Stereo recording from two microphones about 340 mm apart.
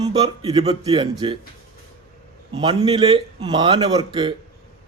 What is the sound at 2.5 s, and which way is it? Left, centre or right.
Speech, centre.